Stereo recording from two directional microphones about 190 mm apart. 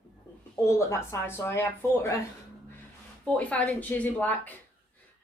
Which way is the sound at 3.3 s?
5° left (ahead or behind).